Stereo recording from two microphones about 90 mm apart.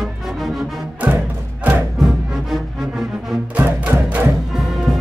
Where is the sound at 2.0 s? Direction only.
5° right (ahead or behind).